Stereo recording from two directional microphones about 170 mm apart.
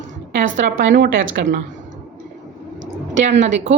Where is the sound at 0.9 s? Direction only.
90° right.